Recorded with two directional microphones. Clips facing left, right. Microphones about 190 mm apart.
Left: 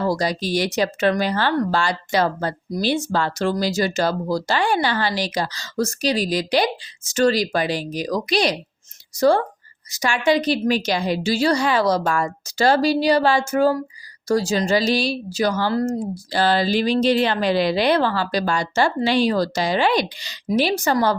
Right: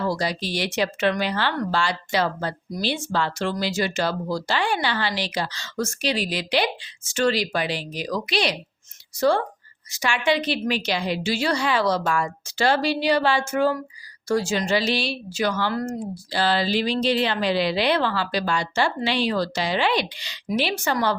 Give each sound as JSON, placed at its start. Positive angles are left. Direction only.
{"t": 0.0, "sound": "a woman's voice", "side_deg": 40}